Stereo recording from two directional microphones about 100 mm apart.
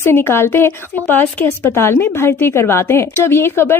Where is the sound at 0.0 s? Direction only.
25° left (ahead or behind).